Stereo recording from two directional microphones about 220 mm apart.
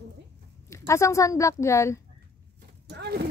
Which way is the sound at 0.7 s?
15° left (ahead or behind).